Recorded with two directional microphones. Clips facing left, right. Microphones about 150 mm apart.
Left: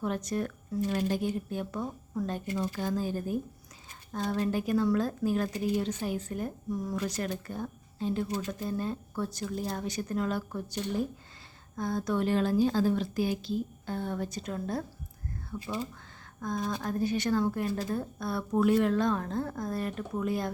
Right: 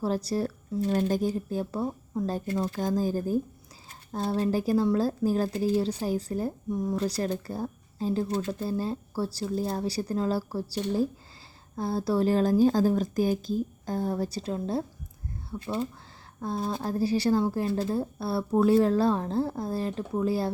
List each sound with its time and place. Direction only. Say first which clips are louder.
0.0 s speech: right 4 dB; 35° right (ahead or behind)
15.5 s speech: right 2 dB; 15° right (ahead or behind)
16.4 s speech: right 2 dB; 30° right (ahead or behind)